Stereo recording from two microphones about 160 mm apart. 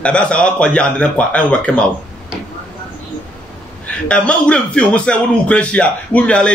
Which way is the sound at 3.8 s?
5° left (ahead or behind).